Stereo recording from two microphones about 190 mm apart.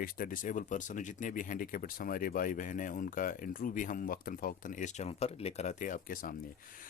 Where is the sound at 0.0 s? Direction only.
45° left (ahead or behind).